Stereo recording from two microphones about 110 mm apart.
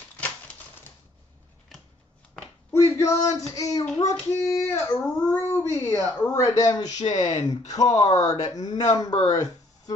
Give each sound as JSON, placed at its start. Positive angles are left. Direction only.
{"t": 2.7, "sound": "a sound", "side_deg": 25}
{"t": 4.0, "sound": "speech", "side_deg": 30}
{"t": 7.0, "sound": "speech", "side_deg": 90}
{"t": 7.7, "sound": "speech", "side_deg": 35}